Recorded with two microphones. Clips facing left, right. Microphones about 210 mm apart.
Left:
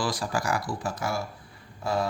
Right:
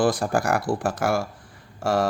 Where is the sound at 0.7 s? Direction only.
75° right (ahead or behind).